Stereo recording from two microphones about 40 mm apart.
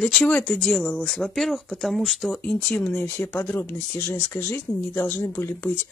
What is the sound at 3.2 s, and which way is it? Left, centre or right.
Speech, left.